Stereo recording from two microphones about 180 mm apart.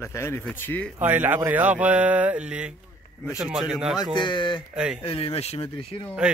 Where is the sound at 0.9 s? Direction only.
10° right (ahead or behind).